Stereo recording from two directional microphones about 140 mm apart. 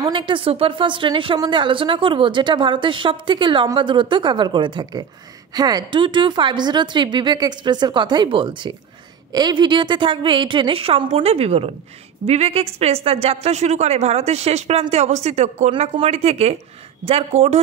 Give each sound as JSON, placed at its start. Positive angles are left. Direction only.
{"t": 0.0, "sound": "a woman's voice", "side_deg": -35}